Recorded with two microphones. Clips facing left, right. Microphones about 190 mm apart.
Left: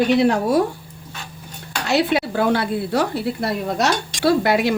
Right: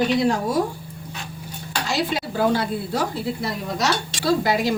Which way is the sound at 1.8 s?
65° left (ahead or behind).